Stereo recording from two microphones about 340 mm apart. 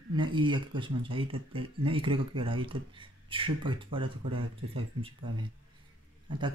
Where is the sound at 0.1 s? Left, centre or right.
Centre.